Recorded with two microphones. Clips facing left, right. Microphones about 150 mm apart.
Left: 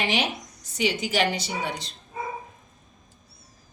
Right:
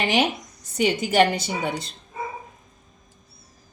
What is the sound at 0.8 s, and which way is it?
Speech, 50° right (ahead or behind).